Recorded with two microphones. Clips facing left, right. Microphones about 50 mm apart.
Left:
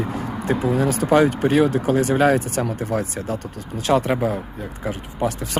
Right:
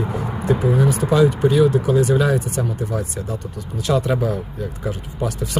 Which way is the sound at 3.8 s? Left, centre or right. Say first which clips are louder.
Left 1 dB; left.